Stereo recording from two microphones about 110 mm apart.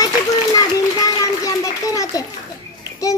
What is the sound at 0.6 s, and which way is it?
A child's voice, 30° left (ahead or behind).